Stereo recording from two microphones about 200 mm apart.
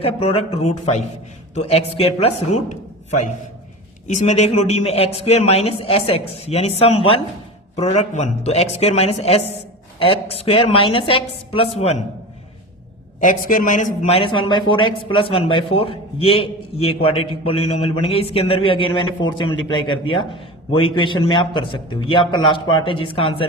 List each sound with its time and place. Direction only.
0.0 s a man's voice: 30° left (ahead or behind)
13.1 s a man's voice: 40° left (ahead or behind)